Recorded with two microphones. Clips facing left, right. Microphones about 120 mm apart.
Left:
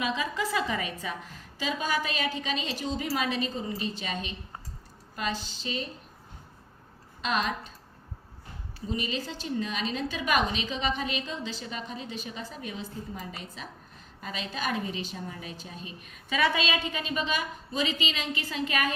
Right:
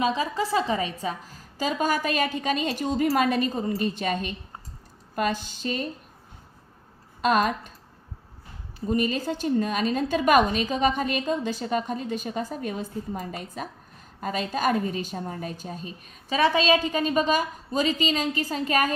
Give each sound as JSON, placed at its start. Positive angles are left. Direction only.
{"t": 0.0, "sound": "a woman's voice", "side_deg": -35}
{"t": 7.2, "sound": "a woman's voice", "side_deg": -50}
{"t": 8.9, "sound": "a woman's voice", "side_deg": -50}